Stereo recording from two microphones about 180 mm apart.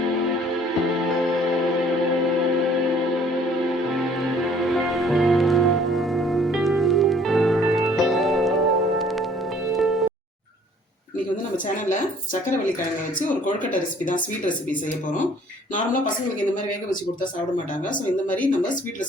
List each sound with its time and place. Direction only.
4.4 s music: centre (ahead or behind)
11.5 s a sound: 45° left (ahead or behind)
14.0 s a woman's voice: 45° left (ahead or behind)